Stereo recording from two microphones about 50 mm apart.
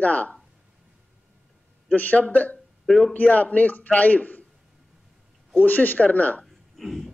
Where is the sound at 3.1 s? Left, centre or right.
Left.